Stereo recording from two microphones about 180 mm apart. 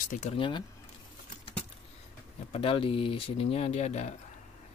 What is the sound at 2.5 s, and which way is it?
Speech, 30° left (ahead or behind).